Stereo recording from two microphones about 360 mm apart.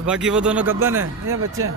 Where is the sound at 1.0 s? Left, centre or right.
Right.